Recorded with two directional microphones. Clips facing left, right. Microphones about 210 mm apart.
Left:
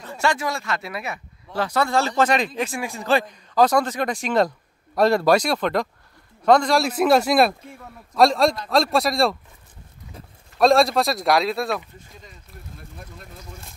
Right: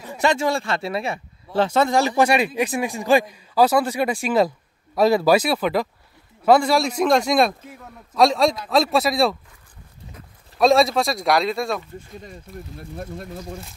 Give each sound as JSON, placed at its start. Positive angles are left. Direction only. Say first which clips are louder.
{"t": 0.0, "sound": "a man's voice", "louder": "right 3 dB", "side_deg": -15}
{"t": 10.6, "sound": "a man's voice", "louder": "even", "side_deg": 0}
{"t": 12.9, "sound": "speech", "louder": "right 13 dB", "side_deg": -45}